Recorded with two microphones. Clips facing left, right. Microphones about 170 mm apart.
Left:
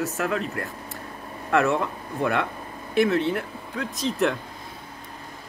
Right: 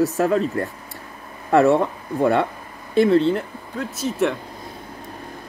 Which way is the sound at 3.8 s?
5° right (ahead or behind).